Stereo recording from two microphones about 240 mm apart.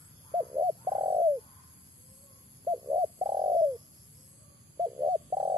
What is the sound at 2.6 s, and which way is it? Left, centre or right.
Bird, centre.